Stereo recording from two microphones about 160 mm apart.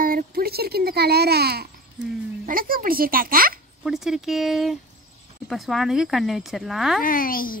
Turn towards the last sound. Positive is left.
turn(degrees=60)  # may be behind; listen again after turning